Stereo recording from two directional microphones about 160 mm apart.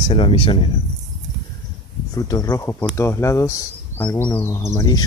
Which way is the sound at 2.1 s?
20° left (ahead or behind).